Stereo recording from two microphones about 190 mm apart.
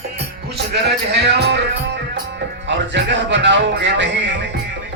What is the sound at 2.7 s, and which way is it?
Speech, 70° right (ahead or behind).